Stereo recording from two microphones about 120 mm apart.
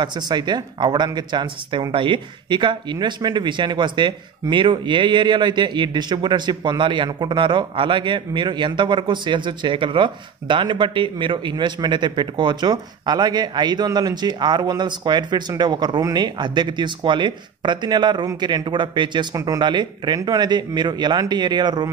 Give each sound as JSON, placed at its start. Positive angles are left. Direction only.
{"t": 0.0, "sound": "speech", "side_deg": -40}